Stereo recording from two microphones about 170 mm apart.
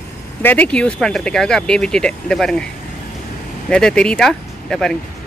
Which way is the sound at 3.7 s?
5° left (ahead or behind).